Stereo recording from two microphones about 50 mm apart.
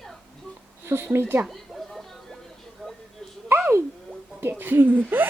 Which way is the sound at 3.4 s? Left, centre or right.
Right.